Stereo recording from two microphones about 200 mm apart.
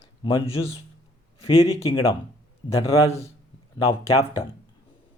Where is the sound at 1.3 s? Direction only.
30° left (ahead or behind).